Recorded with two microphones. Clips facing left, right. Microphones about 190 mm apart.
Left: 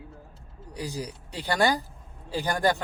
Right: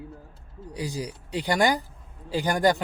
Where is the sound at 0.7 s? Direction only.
15° right (ahead or behind).